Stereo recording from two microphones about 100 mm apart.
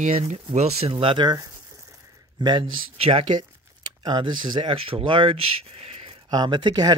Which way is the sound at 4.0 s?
50° right (ahead or behind).